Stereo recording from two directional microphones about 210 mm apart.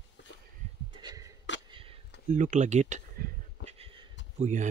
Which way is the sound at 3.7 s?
25° right (ahead or behind).